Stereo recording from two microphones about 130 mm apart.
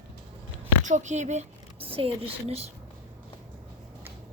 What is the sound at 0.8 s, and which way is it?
A woman's voice, 70° right (ahead or behind).